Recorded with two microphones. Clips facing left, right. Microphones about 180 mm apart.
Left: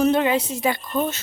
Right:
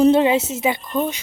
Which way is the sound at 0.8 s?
Centre (ahead or behind).